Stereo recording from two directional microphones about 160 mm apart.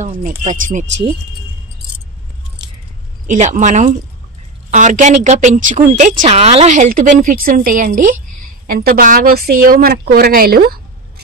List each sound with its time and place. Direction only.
0.0 s a woman's voice: 50° right (ahead or behind)
3.3 s a woman's voice: 50° right (ahead or behind)
8.6 s a woman's voice: 65° right (ahead or behind)